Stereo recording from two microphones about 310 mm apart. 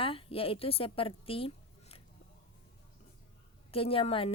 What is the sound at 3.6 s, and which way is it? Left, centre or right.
Speech, centre.